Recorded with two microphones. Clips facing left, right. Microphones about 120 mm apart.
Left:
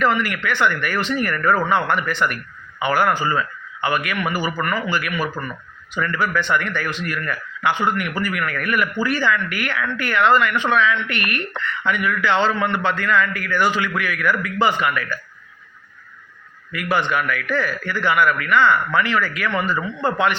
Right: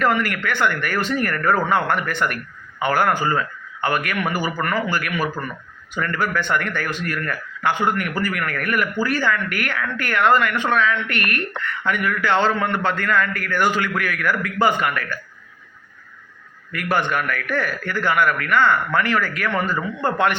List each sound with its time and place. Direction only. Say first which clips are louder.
0.0 s a man's voice: even; 50° right (ahead or behind)
16.7 s a man's voice: left 1 dB; 50° right (ahead or behind)